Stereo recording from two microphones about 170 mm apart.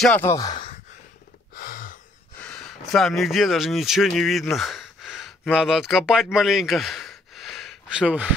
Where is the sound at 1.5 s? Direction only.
60° left (ahead or behind).